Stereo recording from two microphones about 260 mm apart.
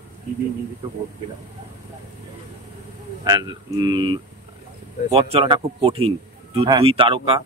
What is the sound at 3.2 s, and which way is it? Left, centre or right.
A man's voice, centre.